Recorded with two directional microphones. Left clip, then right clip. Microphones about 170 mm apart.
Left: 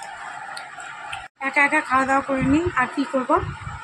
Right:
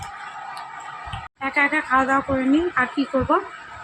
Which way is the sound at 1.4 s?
Centre (ahead or behind).